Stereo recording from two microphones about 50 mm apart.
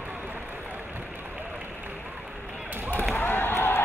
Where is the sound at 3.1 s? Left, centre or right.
Left.